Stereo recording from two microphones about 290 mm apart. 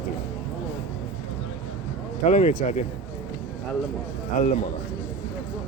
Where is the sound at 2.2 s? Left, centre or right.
Left.